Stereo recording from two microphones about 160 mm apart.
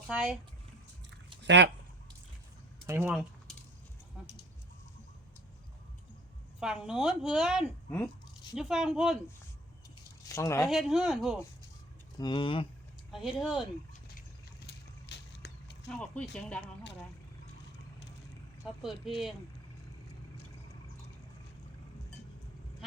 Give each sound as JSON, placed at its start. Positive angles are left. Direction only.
{"t": 0.1, "sound": "speech", "side_deg": -5}
{"t": 1.4, "sound": "speech", "side_deg": -90}
{"t": 2.8, "sound": "speech", "side_deg": -10}
{"t": 6.6, "sound": "speech", "side_deg": -5}
{"t": 7.9, "sound": "speech", "side_deg": 10}
{"t": 8.5, "sound": "speech", "side_deg": -5}
{"t": 10.2, "sound": "speech", "side_deg": 20}
{"t": 10.7, "sound": "speech", "side_deg": -5}
{"t": 12.1, "sound": "speech", "side_deg": 30}
{"t": 13.1, "sound": "speech", "side_deg": 0}
{"t": 14.7, "sound": "a sound", "side_deg": 90}
{"t": 16.1, "sound": "speech", "side_deg": 10}
{"t": 18.8, "sound": "speech", "side_deg": 0}
{"t": 22.8, "sound": "quack", "side_deg": 0}